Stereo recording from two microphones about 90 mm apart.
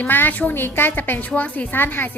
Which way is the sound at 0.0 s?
20° left (ahead or behind).